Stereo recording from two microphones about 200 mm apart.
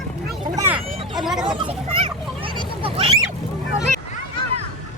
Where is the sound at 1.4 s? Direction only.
25° right (ahead or behind).